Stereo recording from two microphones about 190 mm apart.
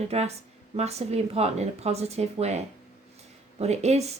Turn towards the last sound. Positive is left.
turn(degrees=-35)  # may be behind; listen again after turning